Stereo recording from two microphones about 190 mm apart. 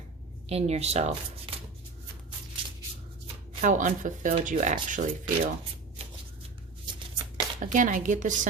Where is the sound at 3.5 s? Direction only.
40° right (ahead or behind).